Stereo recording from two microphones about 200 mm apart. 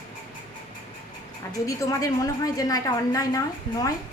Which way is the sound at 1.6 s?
15° left (ahead or behind).